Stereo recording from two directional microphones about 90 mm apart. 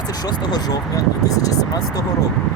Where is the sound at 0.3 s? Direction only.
50° left (ahead or behind).